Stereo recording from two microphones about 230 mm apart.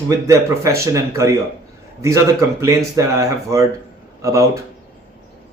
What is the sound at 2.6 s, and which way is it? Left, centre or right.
Speech, centre.